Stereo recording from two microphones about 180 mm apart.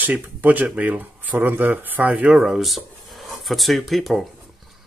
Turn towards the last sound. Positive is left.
turn(degrees=0)  # may be behind; listen again after turning